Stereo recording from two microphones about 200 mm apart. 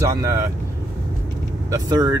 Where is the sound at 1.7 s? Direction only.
20° right (ahead or behind).